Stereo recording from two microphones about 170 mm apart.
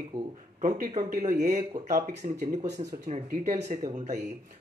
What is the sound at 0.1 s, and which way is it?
Speech, 20° right (ahead or behind).